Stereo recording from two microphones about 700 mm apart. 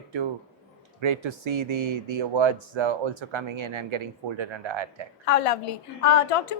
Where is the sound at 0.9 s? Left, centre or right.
Right.